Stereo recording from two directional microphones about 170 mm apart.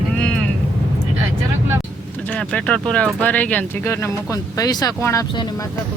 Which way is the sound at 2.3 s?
5° left (ahead or behind).